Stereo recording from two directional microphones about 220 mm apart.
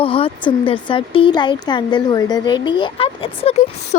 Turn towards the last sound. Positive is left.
turn(degrees=30)  # may be behind; listen again after turning